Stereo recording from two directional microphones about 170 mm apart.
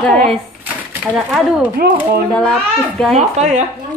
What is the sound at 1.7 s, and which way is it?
Speech, 55° right (ahead or behind).